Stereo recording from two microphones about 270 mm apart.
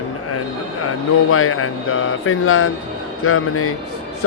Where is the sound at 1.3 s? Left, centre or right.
Left.